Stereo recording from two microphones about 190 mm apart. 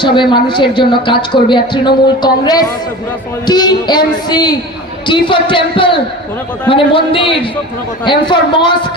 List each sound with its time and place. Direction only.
0.0 s speech: 25° left (ahead or behind)